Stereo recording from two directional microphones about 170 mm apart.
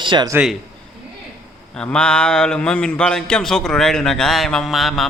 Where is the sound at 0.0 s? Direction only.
25° right (ahead or behind).